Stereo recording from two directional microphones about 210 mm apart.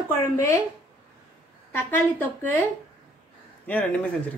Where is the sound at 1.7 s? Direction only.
10° left (ahead or behind).